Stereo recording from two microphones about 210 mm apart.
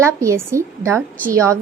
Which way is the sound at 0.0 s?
15° right (ahead or behind).